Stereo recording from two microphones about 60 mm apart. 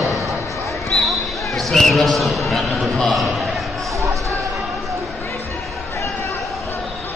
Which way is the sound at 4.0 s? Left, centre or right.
Right.